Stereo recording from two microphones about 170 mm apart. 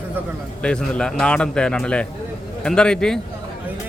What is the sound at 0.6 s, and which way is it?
A man's voice, 5° left (ahead or behind).